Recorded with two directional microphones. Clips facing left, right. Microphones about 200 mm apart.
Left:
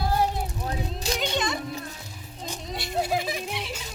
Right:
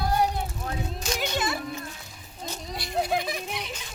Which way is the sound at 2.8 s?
Centre (ahead or behind).